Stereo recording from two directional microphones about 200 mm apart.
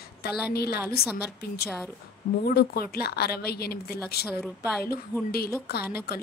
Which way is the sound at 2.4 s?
50° left (ahead or behind).